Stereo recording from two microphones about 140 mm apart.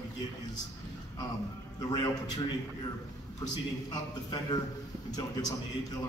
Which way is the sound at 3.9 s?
30° left (ahead or behind).